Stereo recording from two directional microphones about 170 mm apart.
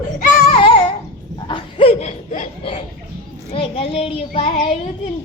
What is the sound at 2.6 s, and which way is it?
Chuckle, 35° left (ahead or behind).